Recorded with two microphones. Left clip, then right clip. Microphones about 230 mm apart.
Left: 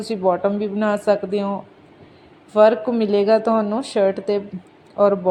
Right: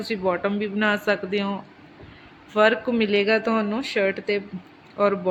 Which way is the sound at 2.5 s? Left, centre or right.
Centre.